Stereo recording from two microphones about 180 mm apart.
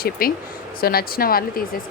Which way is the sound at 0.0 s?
55° left (ahead or behind).